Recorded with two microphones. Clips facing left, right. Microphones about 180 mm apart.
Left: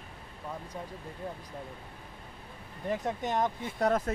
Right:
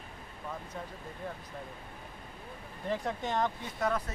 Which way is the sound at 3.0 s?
20° left (ahead or behind).